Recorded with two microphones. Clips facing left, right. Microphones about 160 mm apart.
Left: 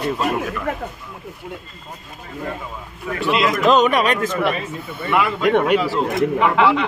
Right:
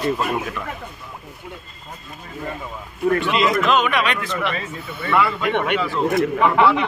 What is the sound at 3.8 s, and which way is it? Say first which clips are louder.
Speech: left 4 dB; 40° left (ahead or behind).